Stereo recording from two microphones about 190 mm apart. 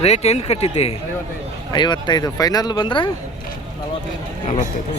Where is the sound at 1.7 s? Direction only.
25° left (ahead or behind).